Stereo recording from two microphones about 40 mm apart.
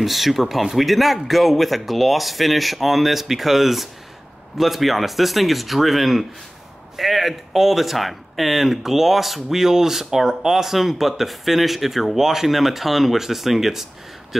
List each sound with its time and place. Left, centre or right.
0.0 s speech: centre